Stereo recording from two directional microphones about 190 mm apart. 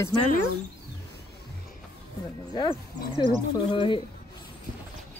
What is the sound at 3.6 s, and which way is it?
Speech, 25° left (ahead or behind).